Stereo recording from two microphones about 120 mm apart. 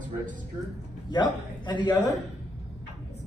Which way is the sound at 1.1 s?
40° left (ahead or behind).